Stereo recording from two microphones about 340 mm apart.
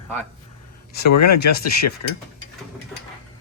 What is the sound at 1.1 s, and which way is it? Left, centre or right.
Speech, left.